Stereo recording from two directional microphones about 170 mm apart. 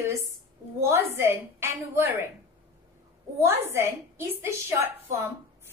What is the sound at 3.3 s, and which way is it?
A woman's voice, 15° right (ahead or behind).